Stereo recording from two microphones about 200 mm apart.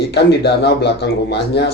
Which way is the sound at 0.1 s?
55° left (ahead or behind).